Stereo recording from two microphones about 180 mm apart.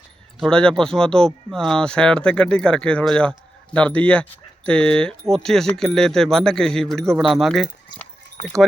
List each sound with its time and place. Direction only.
0.3 s speech: 5° left (ahead or behind)